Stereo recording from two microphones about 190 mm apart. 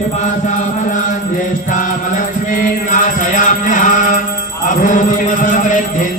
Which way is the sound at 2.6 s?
40° left (ahead or behind).